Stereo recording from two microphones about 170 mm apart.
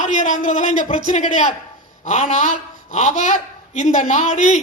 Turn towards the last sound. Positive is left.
turn(degrees=40)  # may be behind; listen again after turning